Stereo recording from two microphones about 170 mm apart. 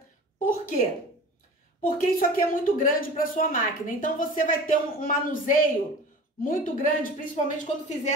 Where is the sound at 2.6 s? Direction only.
55° left (ahead or behind).